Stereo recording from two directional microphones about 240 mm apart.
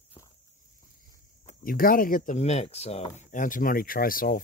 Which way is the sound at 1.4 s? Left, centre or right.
Left.